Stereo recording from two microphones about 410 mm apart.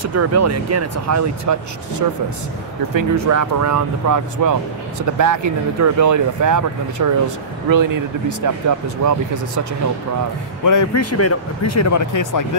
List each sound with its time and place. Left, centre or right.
0.0 s speech: right
10.6 s speech: left